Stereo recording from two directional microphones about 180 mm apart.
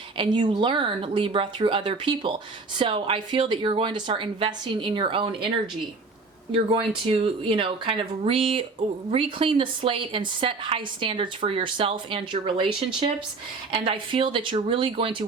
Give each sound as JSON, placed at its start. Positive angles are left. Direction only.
{"t": 0.2, "sound": "speech", "side_deg": -25}